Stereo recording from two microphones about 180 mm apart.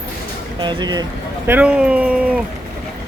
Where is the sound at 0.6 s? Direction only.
25° right (ahead or behind).